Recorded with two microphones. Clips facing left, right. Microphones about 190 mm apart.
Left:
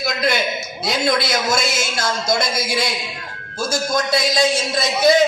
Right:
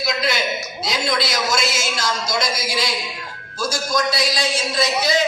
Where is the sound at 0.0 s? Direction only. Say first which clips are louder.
Left 2 dB; 50° left (ahead or behind).